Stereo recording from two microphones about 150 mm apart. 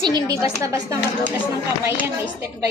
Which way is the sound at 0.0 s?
30° right (ahead or behind).